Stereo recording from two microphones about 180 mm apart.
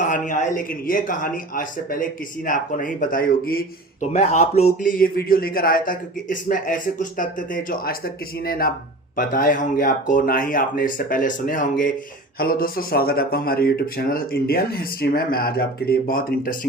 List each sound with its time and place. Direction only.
0.0 s speech: 45° left (ahead or behind)
4.1 s speech: 40° left (ahead or behind)